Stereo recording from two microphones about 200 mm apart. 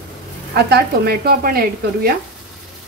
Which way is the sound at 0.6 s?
50° right (ahead or behind).